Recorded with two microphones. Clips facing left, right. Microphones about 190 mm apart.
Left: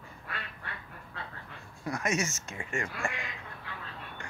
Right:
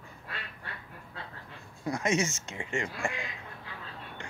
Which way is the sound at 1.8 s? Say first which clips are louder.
Right 3 dB; 25° right (ahead or behind).